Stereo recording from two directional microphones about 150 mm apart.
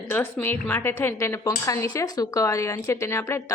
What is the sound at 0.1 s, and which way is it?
A woman's voice, 15° left (ahead or behind).